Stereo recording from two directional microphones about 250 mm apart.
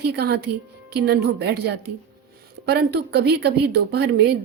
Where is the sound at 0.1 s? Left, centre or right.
Right.